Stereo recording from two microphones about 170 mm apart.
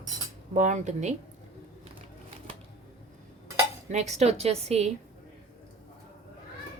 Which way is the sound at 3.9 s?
40° right (ahead or behind).